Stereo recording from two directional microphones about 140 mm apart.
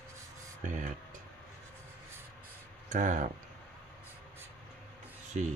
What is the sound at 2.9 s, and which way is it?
Speech, 65° right (ahead or behind).